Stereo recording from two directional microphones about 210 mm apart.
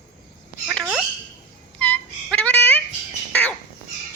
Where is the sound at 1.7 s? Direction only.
10° left (ahead or behind).